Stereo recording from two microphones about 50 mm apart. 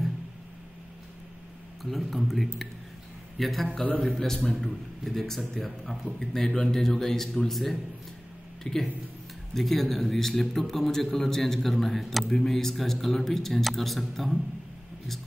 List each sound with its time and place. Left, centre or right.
1.8 s a man's voice: centre
3.8 s a man's voice: left
4.1 s a man's voice: centre